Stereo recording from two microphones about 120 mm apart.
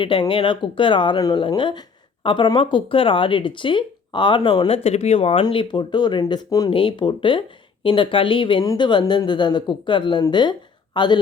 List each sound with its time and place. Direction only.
0.0 s a woman's voice: 45° left (ahead or behind)
4.7 s speech: 60° left (ahead or behind); by 6.7 s 35° left (ahead or behind)
6.7 s speech: 45° left (ahead or behind)
8.6 s a woman's voice: 35° left (ahead or behind)